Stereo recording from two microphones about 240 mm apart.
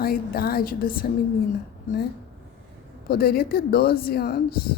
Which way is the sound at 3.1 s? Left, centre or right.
Left.